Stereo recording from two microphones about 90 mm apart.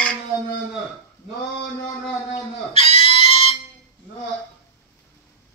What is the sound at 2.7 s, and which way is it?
Pig, 90° left.